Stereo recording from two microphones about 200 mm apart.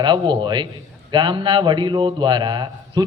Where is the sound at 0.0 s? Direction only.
20° right (ahead or behind).